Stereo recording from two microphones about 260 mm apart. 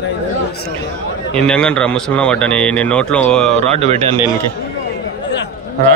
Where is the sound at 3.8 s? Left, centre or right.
Right.